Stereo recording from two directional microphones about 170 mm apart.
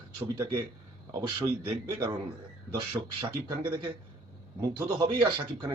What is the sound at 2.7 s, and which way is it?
A man's voice, 25° right (ahead or behind).